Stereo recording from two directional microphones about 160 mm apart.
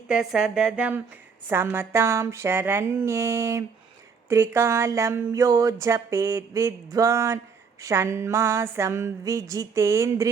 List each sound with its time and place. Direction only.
0.1 s speech: 5° right (ahead or behind)